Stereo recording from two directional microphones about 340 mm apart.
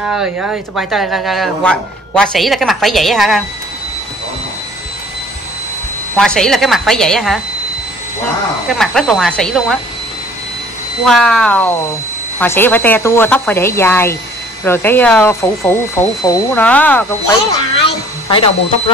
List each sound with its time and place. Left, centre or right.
0.1 s speech: centre
6.1 s speech: centre
8.6 s speech: centre
11.1 s speech: centre